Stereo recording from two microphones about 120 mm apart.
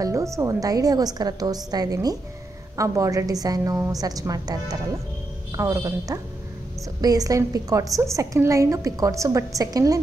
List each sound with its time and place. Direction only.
0.0 s a woman's voice: 25° right (ahead or behind)